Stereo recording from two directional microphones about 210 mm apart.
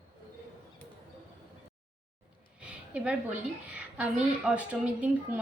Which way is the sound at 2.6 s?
5° right (ahead or behind).